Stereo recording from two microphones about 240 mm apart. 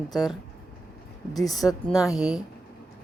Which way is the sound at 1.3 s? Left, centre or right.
Centre.